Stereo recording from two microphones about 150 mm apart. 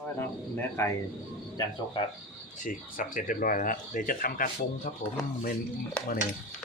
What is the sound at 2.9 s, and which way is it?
Speech, 65° left (ahead or behind).